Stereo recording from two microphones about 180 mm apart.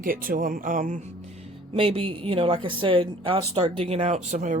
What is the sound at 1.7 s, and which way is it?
Speech, 30° right (ahead or behind).